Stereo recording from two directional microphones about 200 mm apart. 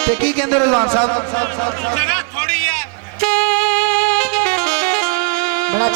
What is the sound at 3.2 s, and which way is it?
Music, 5° left (ahead or behind).